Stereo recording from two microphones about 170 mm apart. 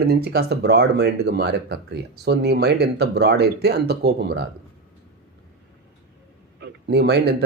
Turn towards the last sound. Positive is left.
turn(degrees=-75)  # may be behind; listen again after turning